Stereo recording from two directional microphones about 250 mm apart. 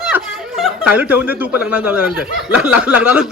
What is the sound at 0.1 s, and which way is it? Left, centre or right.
Speech, centre.